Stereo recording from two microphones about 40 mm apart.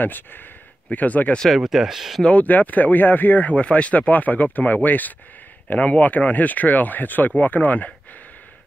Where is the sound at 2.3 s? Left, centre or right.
Left.